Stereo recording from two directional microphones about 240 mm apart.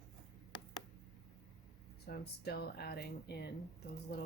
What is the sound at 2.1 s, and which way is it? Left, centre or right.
Speech, left.